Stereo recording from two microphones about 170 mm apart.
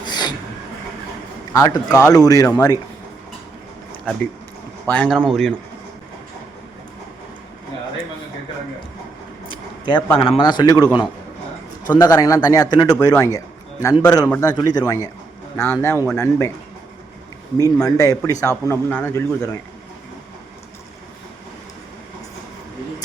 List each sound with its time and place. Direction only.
0.0 s a sound: 25° left (ahead or behind)
1.5 s a man's voice: 20° left (ahead or behind)
4.9 s speech: 5° left (ahead or behind)
9.5 s a sound: 25° left (ahead or behind)
10.2 s a man's voice: 30° left (ahead or behind)
11.9 s a man's voice: 20° left (ahead or behind)
14.3 s a man's voice: 10° left (ahead or behind)
14.5 s a man's voice: 25° left (ahead or behind)
17.8 s a man's voice: 20° left (ahead or behind)